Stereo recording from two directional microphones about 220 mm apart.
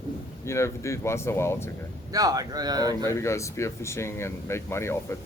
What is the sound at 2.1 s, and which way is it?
Speech, 15° right (ahead or behind).